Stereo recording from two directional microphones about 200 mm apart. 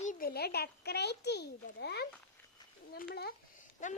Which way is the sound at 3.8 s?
40° left (ahead or behind).